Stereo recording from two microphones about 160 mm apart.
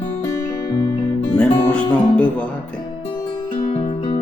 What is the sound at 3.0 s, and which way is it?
Music, 30° left (ahead or behind).